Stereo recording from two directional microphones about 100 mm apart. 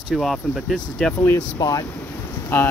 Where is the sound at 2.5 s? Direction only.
20° left (ahead or behind).